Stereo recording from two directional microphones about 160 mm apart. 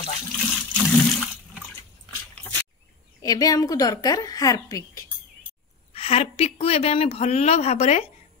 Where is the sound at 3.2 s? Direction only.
25° left (ahead or behind).